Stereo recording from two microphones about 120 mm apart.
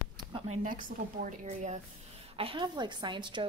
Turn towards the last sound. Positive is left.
turn(degrees=-40)  # may be behind; listen again after turning